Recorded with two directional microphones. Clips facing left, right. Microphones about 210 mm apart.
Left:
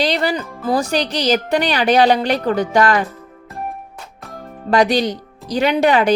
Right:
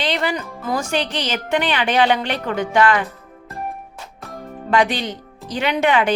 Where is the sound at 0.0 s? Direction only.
40° left (ahead or behind).